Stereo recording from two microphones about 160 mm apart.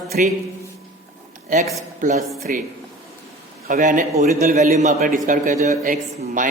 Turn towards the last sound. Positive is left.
turn(degrees=-55)  # may be behind; listen again after turning